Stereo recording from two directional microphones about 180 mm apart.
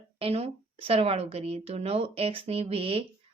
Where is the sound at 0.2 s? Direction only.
35° right (ahead or behind).